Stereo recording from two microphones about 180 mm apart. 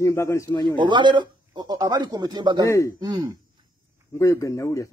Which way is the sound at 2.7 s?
15° left (ahead or behind).